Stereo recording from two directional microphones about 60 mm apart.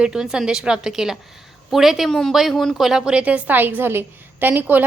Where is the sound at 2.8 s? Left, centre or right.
Centre.